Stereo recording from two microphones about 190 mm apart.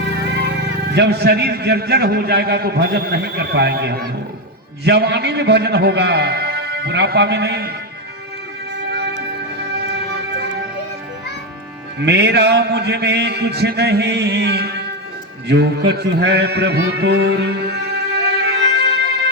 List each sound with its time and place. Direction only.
0.9 s a man's voice: 60° right (ahead or behind)
12.0 s a man's voice: 60° right (ahead or behind)